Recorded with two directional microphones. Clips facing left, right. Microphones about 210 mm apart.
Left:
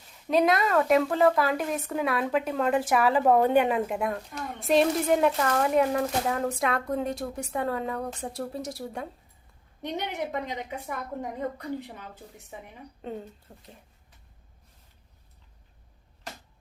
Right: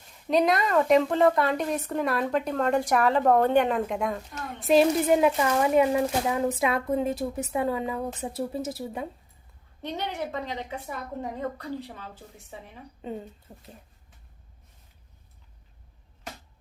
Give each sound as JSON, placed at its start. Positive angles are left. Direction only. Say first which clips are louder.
{"t": 0.3, "sound": "a woman's voice", "louder": "even", "side_deg": 0}
{"t": 9.8, "sound": "a woman's voice", "louder": "even", "side_deg": 15}
{"t": 13.0, "sound": "a woman's voice", "louder": "right 1 dB", "side_deg": 0}
{"t": 13.5, "sound": "speech", "louder": "right 2 dB", "side_deg": -15}